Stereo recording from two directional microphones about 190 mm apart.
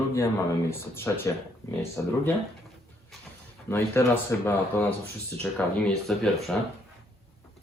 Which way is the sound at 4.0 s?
15° left (ahead or behind).